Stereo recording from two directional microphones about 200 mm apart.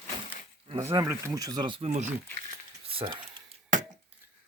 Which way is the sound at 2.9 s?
25° right (ahead or behind).